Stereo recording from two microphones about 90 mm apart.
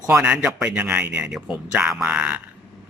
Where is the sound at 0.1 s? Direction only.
10° right (ahead or behind).